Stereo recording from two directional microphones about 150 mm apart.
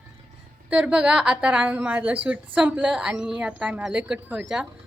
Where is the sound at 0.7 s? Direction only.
5° right (ahead or behind).